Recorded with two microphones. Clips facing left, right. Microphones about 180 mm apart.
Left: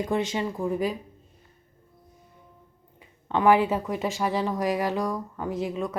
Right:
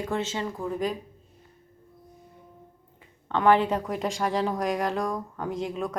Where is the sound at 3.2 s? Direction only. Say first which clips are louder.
Left 1 dB; 10° left (ahead or behind).